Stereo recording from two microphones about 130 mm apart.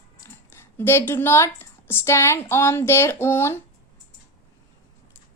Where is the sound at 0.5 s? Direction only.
20° left (ahead or behind).